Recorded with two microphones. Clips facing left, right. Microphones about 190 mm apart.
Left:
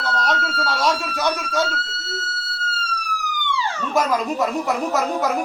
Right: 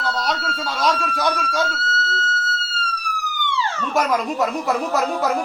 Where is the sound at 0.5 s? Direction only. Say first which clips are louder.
Even; centre (ahead or behind).